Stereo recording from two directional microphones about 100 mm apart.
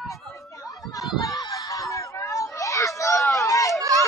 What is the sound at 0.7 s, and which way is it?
Chatter, 35° left (ahead or behind).